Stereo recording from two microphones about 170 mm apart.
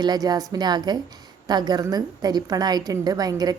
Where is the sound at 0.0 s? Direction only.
25° right (ahead or behind).